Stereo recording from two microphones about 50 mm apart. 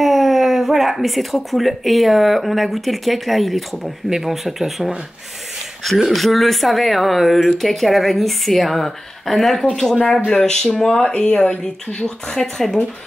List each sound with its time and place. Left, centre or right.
0.0 s speech: centre
6.0 s speech: centre